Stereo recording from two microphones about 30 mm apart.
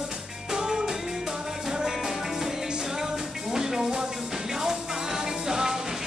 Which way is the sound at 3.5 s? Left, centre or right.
Centre.